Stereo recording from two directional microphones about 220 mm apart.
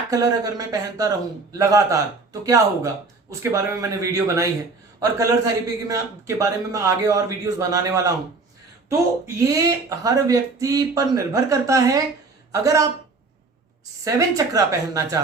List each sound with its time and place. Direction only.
0.1 s a man's voice: 15° right (ahead or behind)
14.0 s speech: 15° right (ahead or behind)